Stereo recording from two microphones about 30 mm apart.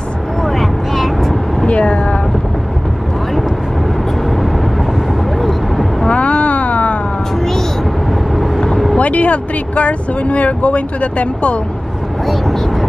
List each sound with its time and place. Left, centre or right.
0.4 s vehicle: centre
1.7 s vehicle: left
5.4 s vehicle: centre
6.0 s a sound: left
7.3 s a sound: centre
9.0 s speech: left